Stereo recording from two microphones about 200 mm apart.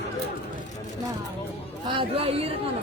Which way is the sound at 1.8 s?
25° right (ahead or behind).